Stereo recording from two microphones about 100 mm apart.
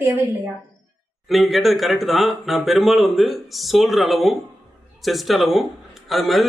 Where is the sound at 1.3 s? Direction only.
Centre (ahead or behind).